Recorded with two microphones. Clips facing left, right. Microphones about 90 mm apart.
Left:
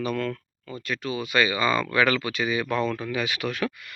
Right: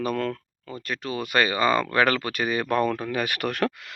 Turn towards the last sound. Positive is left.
turn(degrees=-60)  # may be behind; listen again after turning